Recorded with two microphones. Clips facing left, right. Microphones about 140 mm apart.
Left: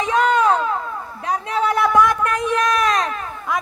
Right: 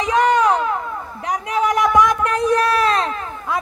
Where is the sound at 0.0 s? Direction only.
15° right (ahead or behind).